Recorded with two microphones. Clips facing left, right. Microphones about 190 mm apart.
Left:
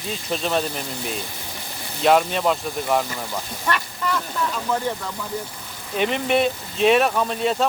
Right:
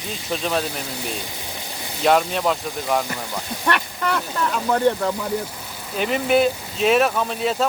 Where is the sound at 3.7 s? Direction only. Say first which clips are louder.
Right 2 dB; 65° right (ahead or behind).